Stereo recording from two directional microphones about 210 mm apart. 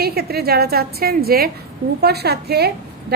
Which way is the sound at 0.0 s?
50° right (ahead or behind).